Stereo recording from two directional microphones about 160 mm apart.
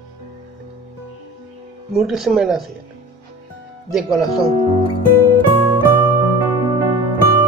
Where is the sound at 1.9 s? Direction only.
Centre (ahead or behind).